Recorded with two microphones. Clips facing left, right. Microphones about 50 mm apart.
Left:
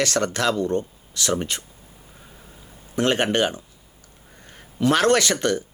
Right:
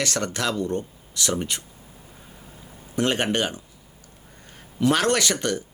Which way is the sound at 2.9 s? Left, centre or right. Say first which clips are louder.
Left 2 dB; left.